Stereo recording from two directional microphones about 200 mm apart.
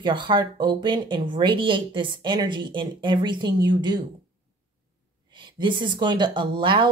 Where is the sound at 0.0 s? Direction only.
25° right (ahead or behind).